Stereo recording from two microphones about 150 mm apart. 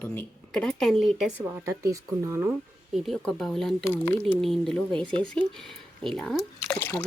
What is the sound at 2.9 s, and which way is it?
Speech, centre (ahead or behind).